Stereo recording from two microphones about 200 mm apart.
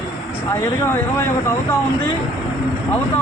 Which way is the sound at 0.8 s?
10° left (ahead or behind).